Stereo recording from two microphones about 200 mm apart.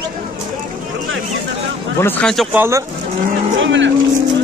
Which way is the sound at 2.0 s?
10° left (ahead or behind).